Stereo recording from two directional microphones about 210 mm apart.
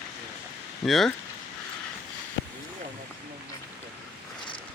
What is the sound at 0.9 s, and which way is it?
Speech, centre (ahead or behind).